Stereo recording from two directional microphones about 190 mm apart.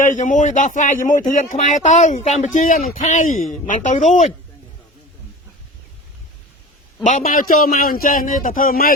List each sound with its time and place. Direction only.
0.0 s speech: 40° left (ahead or behind)
7.0 s a man's voice: 40° left (ahead or behind)